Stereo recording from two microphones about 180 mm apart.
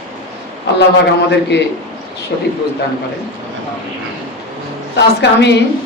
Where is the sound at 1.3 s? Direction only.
70° left (ahead or behind).